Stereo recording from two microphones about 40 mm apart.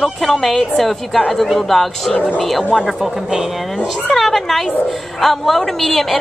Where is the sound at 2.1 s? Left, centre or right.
Left.